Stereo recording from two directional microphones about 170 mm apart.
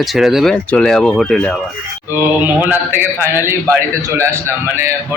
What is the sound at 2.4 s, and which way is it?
A man's voice, 10° right (ahead or behind).